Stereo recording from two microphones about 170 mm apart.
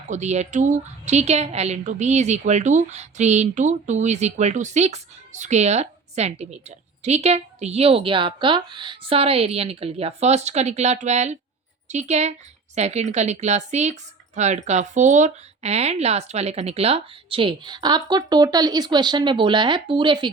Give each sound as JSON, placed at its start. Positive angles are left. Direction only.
{"t": 0.1, "sound": "a woman's voice", "side_deg": -40}